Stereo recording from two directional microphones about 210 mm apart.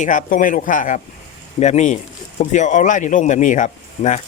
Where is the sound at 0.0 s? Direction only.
40° left (ahead or behind).